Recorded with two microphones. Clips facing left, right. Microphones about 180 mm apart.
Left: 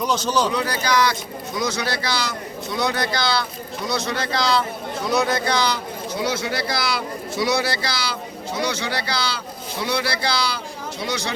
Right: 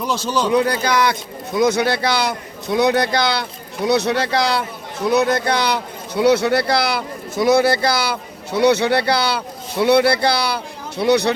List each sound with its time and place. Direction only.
0.0 s speech: 5° right (ahead or behind)
0.5 s speech: 55° right (ahead or behind)